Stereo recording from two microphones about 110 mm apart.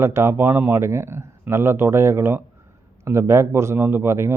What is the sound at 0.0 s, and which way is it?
Speech, 25° right (ahead or behind).